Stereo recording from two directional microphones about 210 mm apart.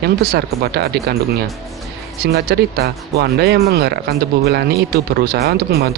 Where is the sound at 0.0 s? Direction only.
50° right (ahead or behind).